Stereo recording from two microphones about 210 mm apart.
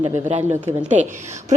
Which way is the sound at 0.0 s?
30° right (ahead or behind).